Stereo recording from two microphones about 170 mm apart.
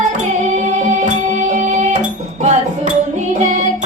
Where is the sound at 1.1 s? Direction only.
45° right (ahead or behind).